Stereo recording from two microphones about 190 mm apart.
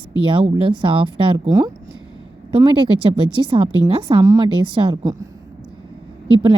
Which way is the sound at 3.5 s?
30° right (ahead or behind).